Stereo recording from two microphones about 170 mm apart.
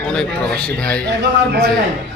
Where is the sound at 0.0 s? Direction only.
5° left (ahead or behind).